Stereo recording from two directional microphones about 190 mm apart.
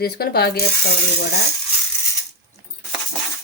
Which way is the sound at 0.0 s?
55° left (ahead or behind).